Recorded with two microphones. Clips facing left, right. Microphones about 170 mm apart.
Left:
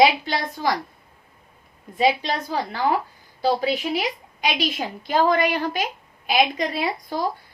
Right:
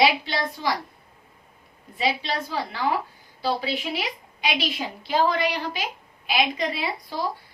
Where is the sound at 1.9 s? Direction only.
45° left (ahead or behind).